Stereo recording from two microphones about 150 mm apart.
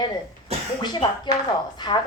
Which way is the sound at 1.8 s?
30° left (ahead or behind).